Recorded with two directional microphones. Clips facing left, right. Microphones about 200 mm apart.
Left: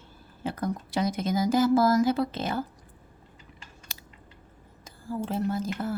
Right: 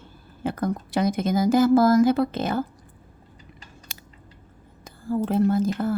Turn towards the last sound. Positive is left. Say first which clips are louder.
# right 8 dB
turn(degrees=-55)  # may be behind; listen again after turning